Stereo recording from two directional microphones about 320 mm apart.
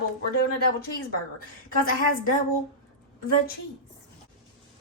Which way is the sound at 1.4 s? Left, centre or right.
Left.